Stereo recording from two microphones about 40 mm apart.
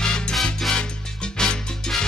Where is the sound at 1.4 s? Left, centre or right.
Centre.